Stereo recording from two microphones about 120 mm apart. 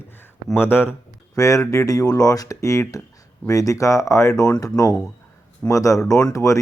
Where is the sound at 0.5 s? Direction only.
20° left (ahead or behind).